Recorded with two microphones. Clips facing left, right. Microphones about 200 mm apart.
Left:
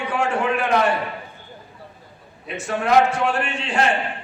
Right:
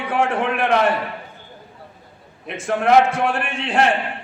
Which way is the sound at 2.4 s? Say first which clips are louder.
Right 3 dB; 55° right (ahead or behind).